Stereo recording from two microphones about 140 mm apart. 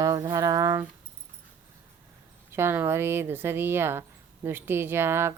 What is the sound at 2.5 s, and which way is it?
Speech, 15° right (ahead or behind).